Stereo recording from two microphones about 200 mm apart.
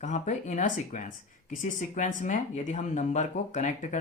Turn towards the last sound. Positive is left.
turn(degrees=40)  # may be behind; listen again after turning